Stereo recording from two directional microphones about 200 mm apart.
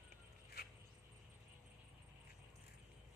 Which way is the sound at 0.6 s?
50° left (ahead or behind).